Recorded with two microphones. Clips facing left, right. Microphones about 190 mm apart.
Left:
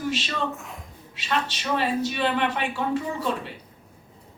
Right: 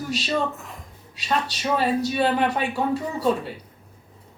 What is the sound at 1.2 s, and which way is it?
Speech, 40° right (ahead or behind).